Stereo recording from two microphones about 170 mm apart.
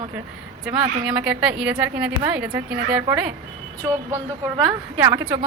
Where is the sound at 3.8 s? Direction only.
20° right (ahead or behind).